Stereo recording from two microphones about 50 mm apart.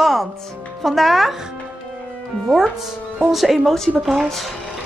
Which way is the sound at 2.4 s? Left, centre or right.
Centre.